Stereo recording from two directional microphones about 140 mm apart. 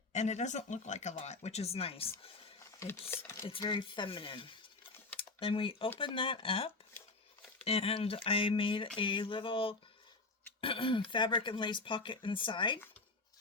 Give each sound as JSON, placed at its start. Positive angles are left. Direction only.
{"t": 0.1, "sound": "speech", "side_deg": 55}
{"t": 3.1, "sound": "speech", "side_deg": 20}
{"t": 3.5, "sound": "speech", "side_deg": 35}